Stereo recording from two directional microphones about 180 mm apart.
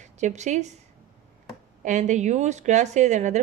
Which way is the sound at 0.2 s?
40° right (ahead or behind).